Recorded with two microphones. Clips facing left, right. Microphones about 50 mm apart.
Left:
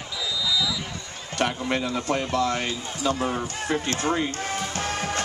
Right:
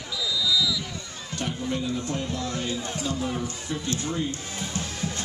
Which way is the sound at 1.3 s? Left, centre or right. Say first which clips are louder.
Left 6 dB; left.